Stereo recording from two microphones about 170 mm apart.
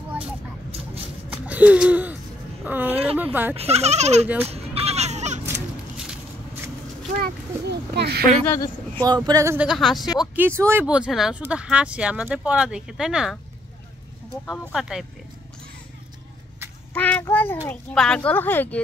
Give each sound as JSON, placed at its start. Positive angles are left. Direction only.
{"t": 1.3, "sound": "a sound", "side_deg": -10}
{"t": 2.6, "sound": "speech", "side_deg": -10}
{"t": 3.5, "sound": "speech", "side_deg": -40}
{"t": 4.5, "sound": "children playing", "side_deg": -35}
{"t": 5.9, "sound": "a sound", "side_deg": -5}
{"t": 7.2, "sound": "a child's voice", "side_deg": -70}
{"t": 8.5, "sound": "speech", "side_deg": 15}
{"t": 9.0, "sound": "speech", "side_deg": -25}
{"t": 9.7, "sound": "speech", "side_deg": 0}
{"t": 10.3, "sound": "speech", "side_deg": -15}
{"t": 14.7, "sound": "speech", "side_deg": 0}
{"t": 16.9, "sound": "a child's voice", "side_deg": 10}